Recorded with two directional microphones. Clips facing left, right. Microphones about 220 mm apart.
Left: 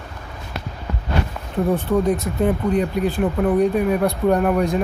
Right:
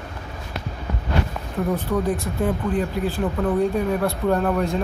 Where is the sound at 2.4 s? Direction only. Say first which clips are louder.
Left 4 dB; 20° left (ahead or behind).